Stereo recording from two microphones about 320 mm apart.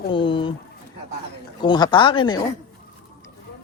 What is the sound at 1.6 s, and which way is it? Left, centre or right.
Speech, centre.